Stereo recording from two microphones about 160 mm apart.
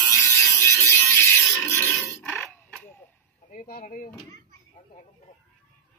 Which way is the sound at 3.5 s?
60° left (ahead or behind).